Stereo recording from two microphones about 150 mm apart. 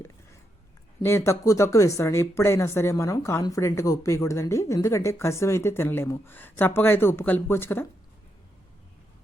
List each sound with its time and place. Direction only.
1.0 s speech: 20° left (ahead or behind)